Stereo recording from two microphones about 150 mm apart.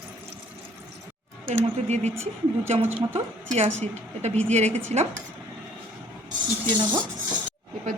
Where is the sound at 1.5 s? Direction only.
50° right (ahead or behind).